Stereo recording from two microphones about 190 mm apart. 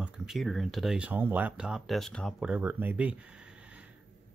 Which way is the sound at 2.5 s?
10° right (ahead or behind).